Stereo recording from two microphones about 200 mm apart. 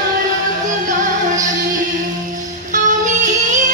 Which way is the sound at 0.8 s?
40° right (ahead or behind).